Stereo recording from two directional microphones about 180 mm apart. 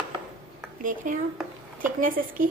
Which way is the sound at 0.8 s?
45° right (ahead or behind).